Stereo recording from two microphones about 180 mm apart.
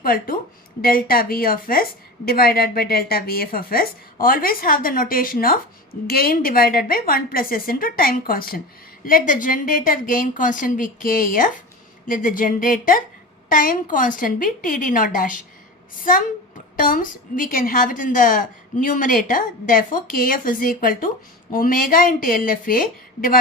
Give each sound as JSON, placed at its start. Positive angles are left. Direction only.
{"t": 0.0, "sound": "a woman's voice", "side_deg": 55}
{"t": 16.7, "sound": "a woman's voice", "side_deg": 50}